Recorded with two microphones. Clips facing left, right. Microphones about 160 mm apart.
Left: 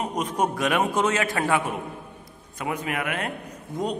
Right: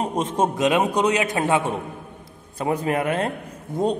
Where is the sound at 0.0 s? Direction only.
25° right (ahead or behind).